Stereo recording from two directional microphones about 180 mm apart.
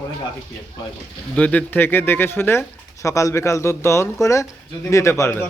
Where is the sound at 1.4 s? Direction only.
10° left (ahead or behind).